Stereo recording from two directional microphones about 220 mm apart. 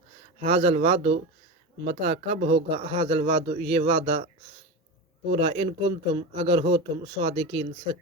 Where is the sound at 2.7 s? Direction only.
25° right (ahead or behind).